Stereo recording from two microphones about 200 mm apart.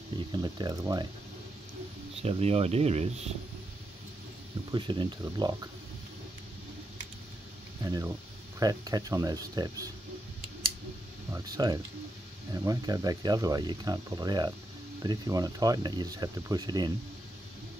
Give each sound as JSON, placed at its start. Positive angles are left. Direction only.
{"t": 0.3, "sound": "speech", "side_deg": -20}
{"t": 2.2, "sound": "speech", "side_deg": -30}
{"t": 4.6, "sound": "speech", "side_deg": -25}
{"t": 7.8, "sound": "speech", "side_deg": -15}
{"t": 11.3, "sound": "speech", "side_deg": -20}